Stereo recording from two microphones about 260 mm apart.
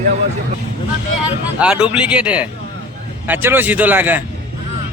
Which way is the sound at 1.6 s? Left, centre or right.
Centre.